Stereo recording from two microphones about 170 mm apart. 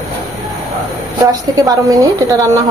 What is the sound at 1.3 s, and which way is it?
A woman's voice, 20° right (ahead or behind).